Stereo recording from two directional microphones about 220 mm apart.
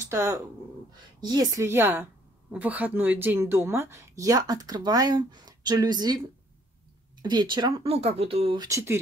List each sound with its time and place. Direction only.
0.1 s a woman's voice: 10° right (ahead or behind)